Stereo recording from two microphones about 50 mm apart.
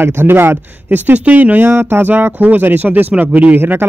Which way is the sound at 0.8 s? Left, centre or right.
Right.